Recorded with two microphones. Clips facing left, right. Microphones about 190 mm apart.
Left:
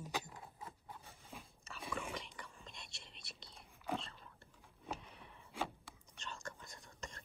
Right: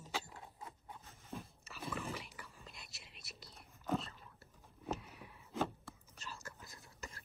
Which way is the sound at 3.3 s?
30° left (ahead or behind).